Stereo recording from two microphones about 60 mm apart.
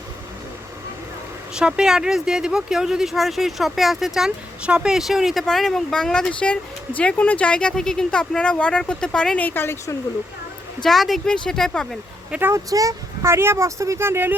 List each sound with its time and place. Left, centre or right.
1.5 s speech: centre
4.6 s speech: centre
9.4 s speech: left
10.8 s speech: centre
12.5 s speech: right
13.2 s speech: right
14.0 s speech: right